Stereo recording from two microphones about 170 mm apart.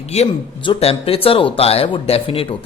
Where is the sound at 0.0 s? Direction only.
40° left (ahead or behind).